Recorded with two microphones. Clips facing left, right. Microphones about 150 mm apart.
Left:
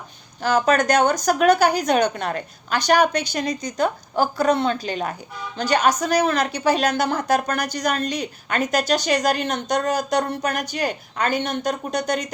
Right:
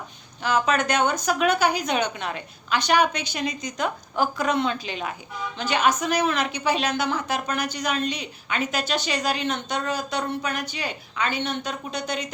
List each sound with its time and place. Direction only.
0.4 s a woman's voice: 40° left (ahead or behind)